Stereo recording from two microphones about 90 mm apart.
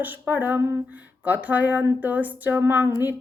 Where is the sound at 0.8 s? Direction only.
20° right (ahead or behind).